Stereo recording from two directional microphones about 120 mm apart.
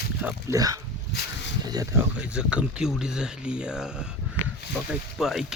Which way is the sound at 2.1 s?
10° right (ahead or behind).